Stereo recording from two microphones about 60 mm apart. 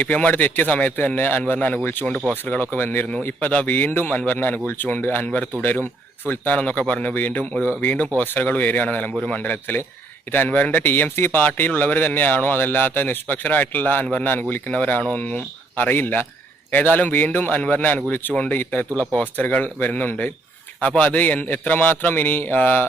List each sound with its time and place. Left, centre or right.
0.0 s speech: left